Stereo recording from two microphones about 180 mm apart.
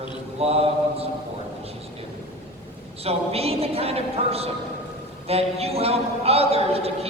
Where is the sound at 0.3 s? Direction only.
35° right (ahead or behind).